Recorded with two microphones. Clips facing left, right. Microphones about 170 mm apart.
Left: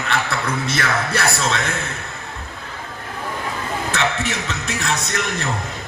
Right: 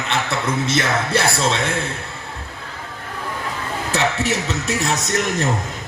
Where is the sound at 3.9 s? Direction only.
40° right (ahead or behind).